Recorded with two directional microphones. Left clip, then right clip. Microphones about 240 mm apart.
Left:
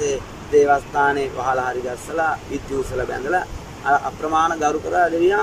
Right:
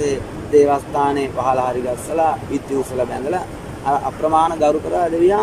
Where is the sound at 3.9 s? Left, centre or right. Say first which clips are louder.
Right 2 dB; centre.